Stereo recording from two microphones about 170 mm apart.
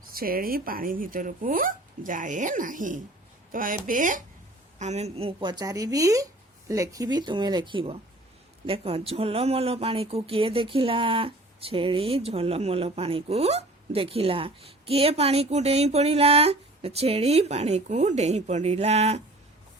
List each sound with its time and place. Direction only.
0.1 s speech: 60° right (ahead or behind)
4.8 s a woman's voice: 40° right (ahead or behind)